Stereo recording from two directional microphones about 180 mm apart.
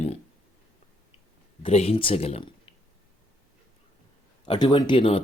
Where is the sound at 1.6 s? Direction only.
35° left (ahead or behind).